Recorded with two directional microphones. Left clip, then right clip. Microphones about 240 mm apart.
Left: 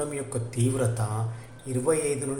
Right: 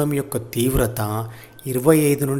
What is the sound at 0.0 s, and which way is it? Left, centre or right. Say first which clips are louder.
A man's voice: right 8 dB; right.